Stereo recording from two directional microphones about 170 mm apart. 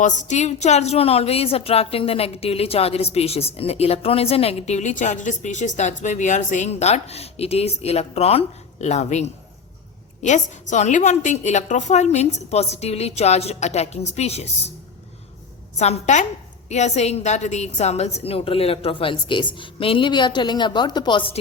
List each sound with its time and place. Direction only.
0.0 s a woman's voice: 45° left (ahead or behind)
15.8 s a woman's voice: 45° left (ahead or behind)